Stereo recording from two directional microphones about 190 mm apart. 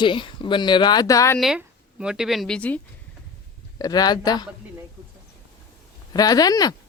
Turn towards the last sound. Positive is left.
turn(degrees=20)  # may be behind; listen again after turning